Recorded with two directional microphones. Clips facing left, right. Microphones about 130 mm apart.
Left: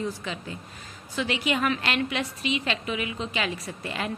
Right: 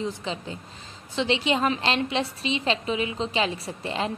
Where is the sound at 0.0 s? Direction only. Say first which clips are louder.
Right 2 dB; 25° right (ahead or behind).